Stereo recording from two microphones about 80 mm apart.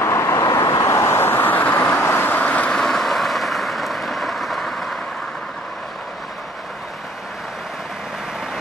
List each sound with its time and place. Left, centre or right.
0.0 s vehicle: left
0.4 s vehicle: left; by 2.0 s centre
2.0 s vehicle: left; by 4.9 s centre